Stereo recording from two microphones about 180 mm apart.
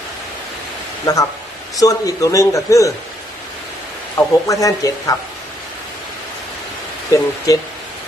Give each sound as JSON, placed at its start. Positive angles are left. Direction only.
{"t": 1.0, "sound": "a man's voice", "side_deg": 20}
{"t": 4.2, "sound": "speech", "side_deg": 20}
{"t": 7.1, "sound": "a man's voice", "side_deg": 20}